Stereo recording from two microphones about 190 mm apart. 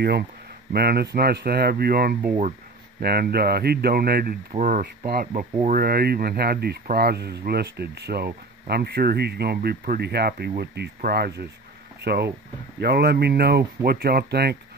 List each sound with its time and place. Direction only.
0.7 s speech: 55° right (ahead or behind)
4.6 s speech: 45° right (ahead or behind)